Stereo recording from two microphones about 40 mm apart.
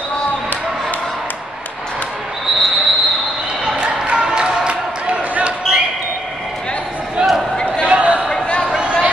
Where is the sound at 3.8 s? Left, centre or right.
Right.